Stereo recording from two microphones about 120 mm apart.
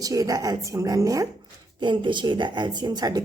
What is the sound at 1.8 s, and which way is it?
Speech, 40° right (ahead or behind).